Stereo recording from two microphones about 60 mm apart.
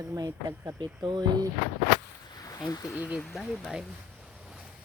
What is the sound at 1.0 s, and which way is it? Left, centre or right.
Speech, right.